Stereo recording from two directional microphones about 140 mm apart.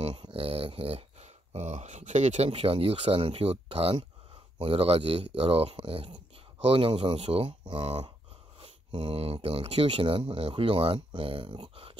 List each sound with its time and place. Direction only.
0.2 s speech: 40° right (ahead or behind)